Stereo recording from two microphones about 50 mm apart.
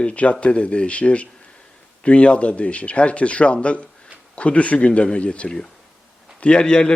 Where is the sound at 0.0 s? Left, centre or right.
Left.